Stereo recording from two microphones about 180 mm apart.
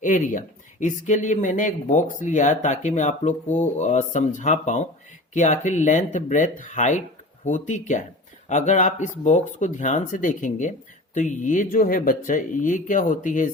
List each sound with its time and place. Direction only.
0.0 s speech: 45° left (ahead or behind)